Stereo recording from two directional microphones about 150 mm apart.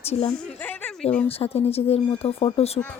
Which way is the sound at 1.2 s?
40° left (ahead or behind).